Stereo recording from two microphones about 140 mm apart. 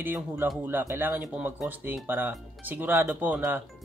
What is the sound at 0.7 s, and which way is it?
Speech, 15° right (ahead or behind).